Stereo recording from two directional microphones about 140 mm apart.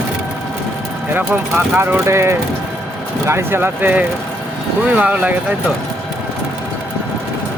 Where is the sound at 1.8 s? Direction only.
15° right (ahead or behind).